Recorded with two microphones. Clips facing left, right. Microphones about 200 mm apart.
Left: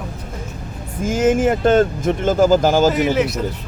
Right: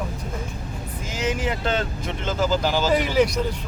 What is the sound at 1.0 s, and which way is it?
Speech, 50° left (ahead or behind).